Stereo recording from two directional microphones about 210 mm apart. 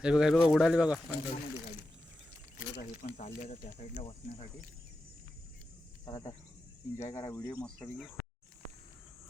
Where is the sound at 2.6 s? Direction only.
45° left (ahead or behind).